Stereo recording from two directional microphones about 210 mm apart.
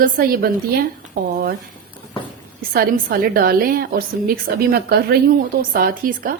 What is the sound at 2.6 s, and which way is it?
A woman's voice, 45° right (ahead or behind).